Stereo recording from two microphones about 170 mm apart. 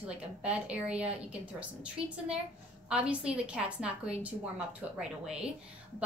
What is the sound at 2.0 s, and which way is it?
Speech, 35° right (ahead or behind).